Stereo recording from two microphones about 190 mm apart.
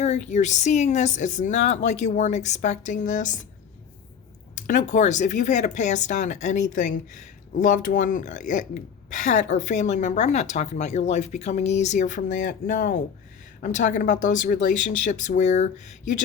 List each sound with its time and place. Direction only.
0.0 s speech: 35° left (ahead or behind)
4.5 s speech: 40° left (ahead or behind)